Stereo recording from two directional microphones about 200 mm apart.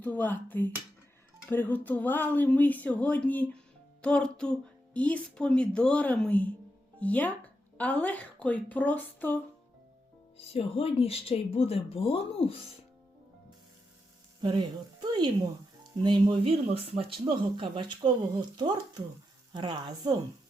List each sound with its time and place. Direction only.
0.0 s speech: 10° left (ahead or behind)
4.0 s music: 5° left (ahead or behind)
4.9 s speech: 5° left (ahead or behind)
10.3 s speech: 30° left (ahead or behind)
14.4 s speech: 20° right (ahead or behind)